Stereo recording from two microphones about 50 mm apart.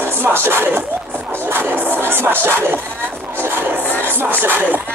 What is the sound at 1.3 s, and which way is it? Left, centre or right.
Music, right.